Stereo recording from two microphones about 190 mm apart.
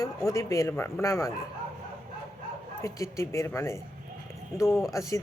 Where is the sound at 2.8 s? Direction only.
15° left (ahead or behind).